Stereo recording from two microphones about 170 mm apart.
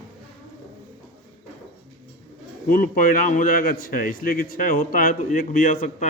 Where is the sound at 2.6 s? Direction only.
55° left (ahead or behind).